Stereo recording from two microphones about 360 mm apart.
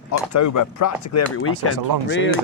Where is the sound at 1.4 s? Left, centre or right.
Left.